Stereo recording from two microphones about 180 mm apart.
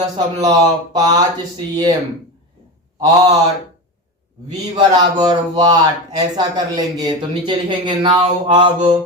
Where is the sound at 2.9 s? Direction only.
20° right (ahead or behind).